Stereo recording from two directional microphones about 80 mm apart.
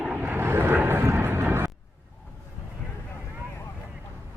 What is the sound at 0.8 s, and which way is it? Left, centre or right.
Music, right.